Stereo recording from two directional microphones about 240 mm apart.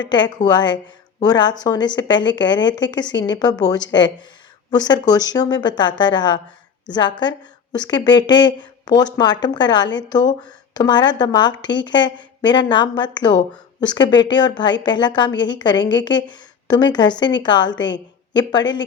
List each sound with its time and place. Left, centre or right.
0.1 s a woman's voice: centre